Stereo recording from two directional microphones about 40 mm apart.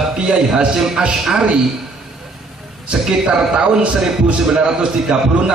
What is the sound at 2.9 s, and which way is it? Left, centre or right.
A man's voice, right.